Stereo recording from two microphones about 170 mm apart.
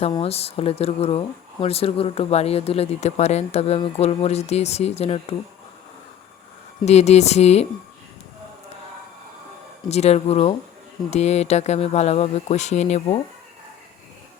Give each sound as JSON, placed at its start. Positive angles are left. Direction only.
{"t": 0.1, "sound": "speech", "side_deg": 35}
{"t": 6.8, "sound": "speech", "side_deg": 40}
{"t": 9.9, "sound": "speech", "side_deg": 40}